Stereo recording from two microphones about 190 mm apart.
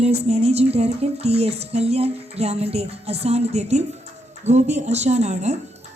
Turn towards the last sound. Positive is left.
turn(degrees=-35)  # may be behind; listen again after turning